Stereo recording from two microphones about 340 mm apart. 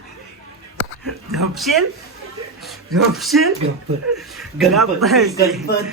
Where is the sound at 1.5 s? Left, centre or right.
Centre.